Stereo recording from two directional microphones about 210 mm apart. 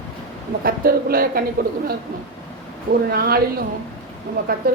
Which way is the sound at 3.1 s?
45° right (ahead or behind).